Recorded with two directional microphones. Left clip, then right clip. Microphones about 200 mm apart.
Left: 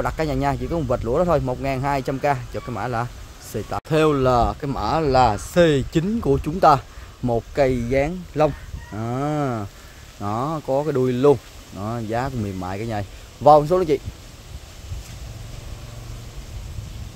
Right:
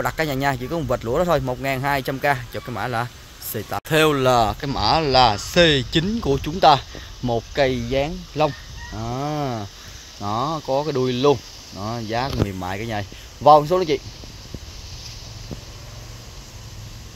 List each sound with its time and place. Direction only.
0.0 s speech: centre (ahead or behind)